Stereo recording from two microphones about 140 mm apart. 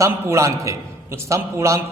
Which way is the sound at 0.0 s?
20° right (ahead or behind).